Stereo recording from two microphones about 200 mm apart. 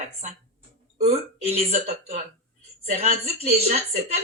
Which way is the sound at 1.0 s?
35° right (ahead or behind).